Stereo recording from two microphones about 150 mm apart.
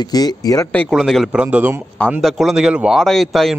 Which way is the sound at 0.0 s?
25° left (ahead or behind).